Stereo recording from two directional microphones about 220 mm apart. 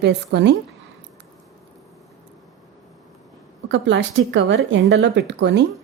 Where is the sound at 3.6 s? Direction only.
55° right (ahead or behind).